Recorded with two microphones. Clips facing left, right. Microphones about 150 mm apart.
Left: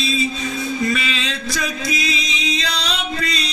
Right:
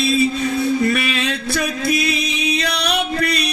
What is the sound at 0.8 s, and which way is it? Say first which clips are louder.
Music: right 3 dB; 60° right (ahead or behind).